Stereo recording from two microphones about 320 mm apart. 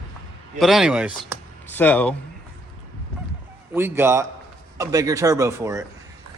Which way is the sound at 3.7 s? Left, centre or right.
Centre.